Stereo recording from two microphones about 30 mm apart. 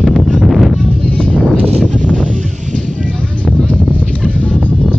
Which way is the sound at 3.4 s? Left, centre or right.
Left.